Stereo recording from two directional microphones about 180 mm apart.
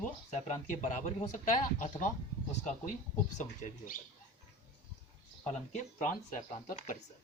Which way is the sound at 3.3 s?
40° left (ahead or behind).